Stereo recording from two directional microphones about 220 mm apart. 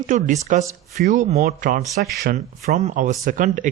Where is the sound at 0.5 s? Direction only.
35° right (ahead or behind).